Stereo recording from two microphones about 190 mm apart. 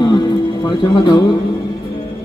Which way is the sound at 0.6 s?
25° left (ahead or behind).